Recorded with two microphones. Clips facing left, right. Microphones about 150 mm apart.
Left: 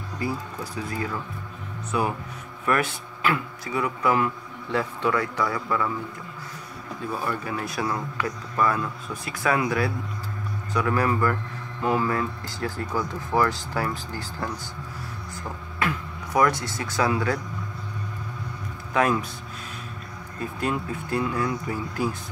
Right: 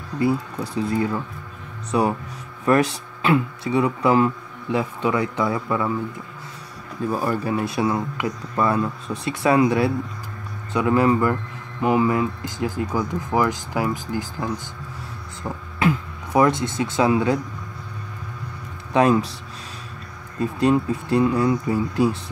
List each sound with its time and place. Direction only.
0.2 s speech: 25° right (ahead or behind)
4.6 s speech: 15° right (ahead or behind)
7.1 s speech: 40° right (ahead or behind)
7.5 s speech: 25° right (ahead or behind)
15.8 s speech: 25° right (ahead or behind)
18.9 s speech: 25° right (ahead or behind)
20.6 s speech: 30° right (ahead or behind)